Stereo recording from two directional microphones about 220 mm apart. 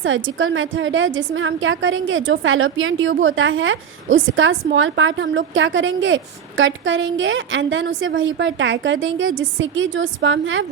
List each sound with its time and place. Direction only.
0.0 s a woman's voice: 60° right (ahead or behind)